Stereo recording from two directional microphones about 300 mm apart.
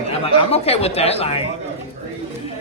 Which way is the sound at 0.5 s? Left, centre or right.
Centre.